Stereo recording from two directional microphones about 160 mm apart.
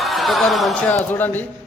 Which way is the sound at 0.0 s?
Centre (ahead or behind).